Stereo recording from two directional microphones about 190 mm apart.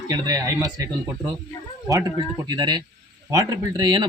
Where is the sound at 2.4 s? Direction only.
20° right (ahead or behind).